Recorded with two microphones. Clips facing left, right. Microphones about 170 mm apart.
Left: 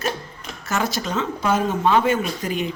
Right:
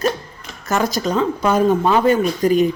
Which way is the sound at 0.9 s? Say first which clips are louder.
Right 6 dB; 40° right (ahead or behind).